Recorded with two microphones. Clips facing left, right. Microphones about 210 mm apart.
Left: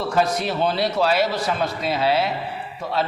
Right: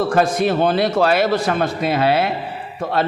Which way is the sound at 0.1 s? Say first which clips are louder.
Right 5 dB; 50° right (ahead or behind).